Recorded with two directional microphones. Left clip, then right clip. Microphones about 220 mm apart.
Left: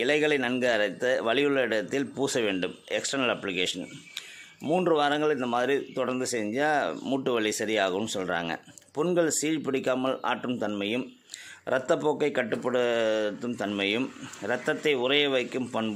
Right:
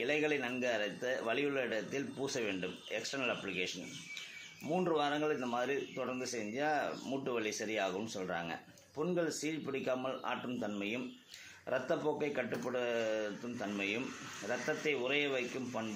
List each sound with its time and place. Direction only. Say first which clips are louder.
0.0 s speech: left 10 dB; 45° left (ahead or behind)